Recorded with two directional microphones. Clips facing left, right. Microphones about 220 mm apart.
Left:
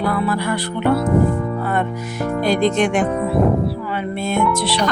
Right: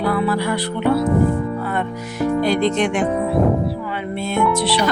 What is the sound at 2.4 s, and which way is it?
Speech, 45° left (ahead or behind).